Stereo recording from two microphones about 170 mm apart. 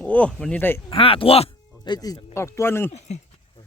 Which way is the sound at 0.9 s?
30° left (ahead or behind).